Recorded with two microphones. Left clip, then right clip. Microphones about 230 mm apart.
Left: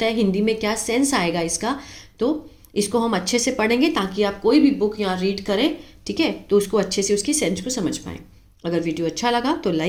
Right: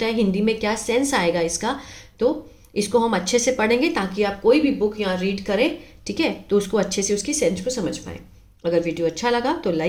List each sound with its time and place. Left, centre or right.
0.0 s speech: centre
6.1 s speech: centre